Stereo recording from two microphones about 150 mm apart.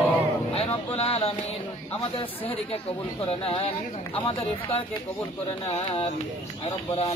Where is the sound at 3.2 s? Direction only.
40° left (ahead or behind).